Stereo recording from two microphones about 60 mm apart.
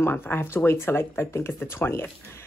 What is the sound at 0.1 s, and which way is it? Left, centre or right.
Speech, left.